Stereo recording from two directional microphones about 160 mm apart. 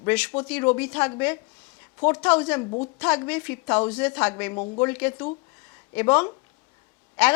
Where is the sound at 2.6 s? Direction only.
35° left (ahead or behind).